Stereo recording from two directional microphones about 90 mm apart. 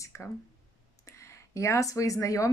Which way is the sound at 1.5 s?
35° left (ahead or behind).